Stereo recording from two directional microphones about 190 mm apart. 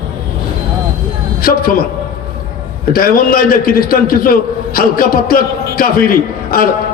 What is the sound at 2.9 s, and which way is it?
A man's voice, 50° left (ahead or behind).